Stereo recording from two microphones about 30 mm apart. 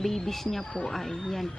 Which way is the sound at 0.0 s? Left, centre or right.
Centre.